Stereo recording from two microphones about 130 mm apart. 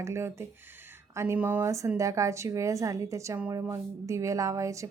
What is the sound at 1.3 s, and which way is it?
A woman's voice, 15° right (ahead or behind).